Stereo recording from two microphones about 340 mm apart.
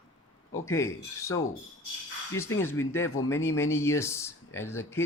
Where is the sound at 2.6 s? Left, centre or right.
Centre.